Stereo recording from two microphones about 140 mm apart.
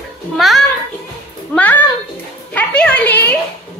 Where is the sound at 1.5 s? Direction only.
10° left (ahead or behind).